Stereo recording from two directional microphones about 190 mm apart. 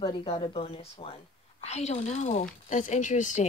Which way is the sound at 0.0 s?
25° left (ahead or behind).